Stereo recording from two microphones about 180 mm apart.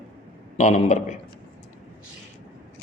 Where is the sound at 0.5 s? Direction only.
40° left (ahead or behind).